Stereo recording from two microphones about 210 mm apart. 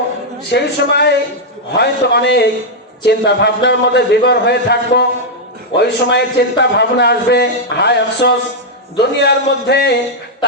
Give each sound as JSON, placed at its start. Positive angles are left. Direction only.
{"t": 0.5, "sound": "a man's voice", "side_deg": 50}